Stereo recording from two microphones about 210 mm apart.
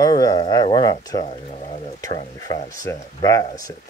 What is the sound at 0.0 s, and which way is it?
Speech, 20° left (ahead or behind).